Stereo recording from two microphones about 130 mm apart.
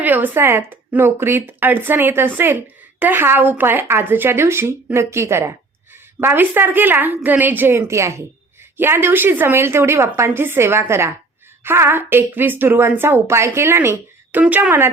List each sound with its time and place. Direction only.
0.0 s a woman's voice: 15° right (ahead or behind)